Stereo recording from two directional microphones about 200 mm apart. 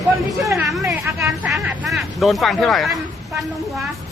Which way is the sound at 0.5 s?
Centre (ahead or behind).